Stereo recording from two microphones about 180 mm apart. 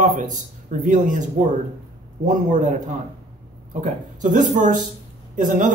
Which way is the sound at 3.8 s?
45° right (ahead or behind).